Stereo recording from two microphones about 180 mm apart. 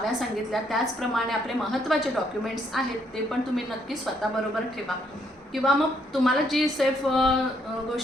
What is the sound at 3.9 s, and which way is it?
A woman's voice, centre (ahead or behind).